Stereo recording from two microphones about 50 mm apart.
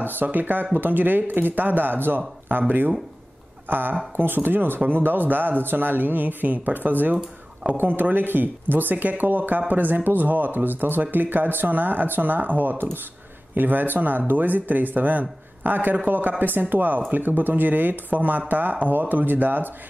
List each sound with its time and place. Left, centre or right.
0.0 s speech: right
3.6 s speech: right